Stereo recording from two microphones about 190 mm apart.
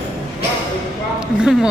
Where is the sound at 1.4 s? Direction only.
5° right (ahead or behind).